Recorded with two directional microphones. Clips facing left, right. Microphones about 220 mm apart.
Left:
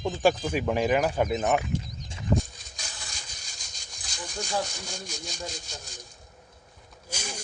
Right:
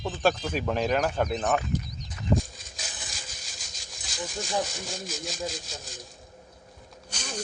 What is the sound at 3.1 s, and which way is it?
Rub, centre (ahead or behind).